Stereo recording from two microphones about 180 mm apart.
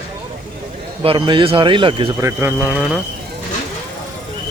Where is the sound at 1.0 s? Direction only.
30° right (ahead or behind).